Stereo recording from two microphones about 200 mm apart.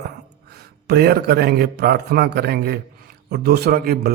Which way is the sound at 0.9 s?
55° right (ahead or behind).